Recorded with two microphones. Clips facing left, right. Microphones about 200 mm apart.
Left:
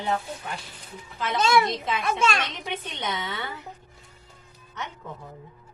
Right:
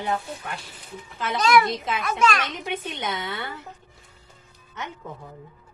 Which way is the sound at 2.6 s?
10° right (ahead or behind).